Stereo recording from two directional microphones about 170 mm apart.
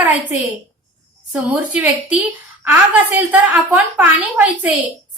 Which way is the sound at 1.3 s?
10° right (ahead or behind).